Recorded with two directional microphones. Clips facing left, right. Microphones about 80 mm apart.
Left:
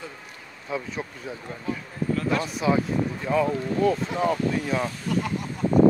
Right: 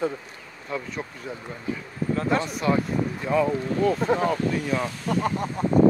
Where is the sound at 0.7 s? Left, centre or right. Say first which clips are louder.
Left 1 dB; centre.